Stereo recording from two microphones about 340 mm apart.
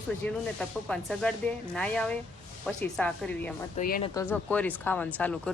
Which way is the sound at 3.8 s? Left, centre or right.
Left.